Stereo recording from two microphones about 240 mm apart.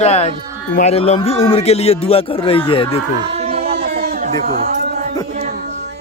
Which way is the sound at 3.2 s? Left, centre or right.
Right.